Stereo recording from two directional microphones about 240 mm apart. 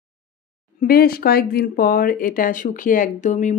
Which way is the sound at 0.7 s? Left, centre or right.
Left.